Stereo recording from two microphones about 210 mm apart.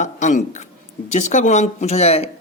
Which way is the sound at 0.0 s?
35° left (ahead or behind).